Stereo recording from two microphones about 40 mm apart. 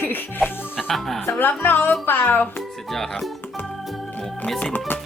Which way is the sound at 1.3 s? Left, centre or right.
Left.